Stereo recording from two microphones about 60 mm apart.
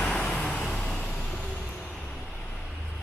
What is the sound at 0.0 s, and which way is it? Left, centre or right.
Vehicle, centre.